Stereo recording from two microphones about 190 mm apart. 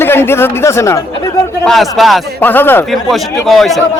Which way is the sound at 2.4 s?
10° left (ahead or behind).